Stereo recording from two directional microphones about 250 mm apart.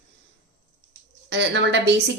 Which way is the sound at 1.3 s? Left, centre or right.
Right.